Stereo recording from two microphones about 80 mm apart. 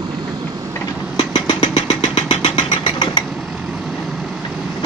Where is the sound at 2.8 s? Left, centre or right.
Left.